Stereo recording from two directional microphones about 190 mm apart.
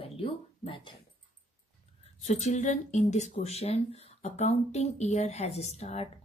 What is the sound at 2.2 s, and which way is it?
A woman's voice, 35° left (ahead or behind).